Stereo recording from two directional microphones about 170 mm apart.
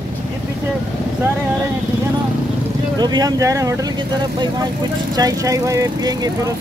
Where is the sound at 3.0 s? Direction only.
25° right (ahead or behind).